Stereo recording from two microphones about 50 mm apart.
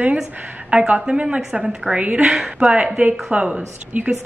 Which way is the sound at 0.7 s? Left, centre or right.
Right.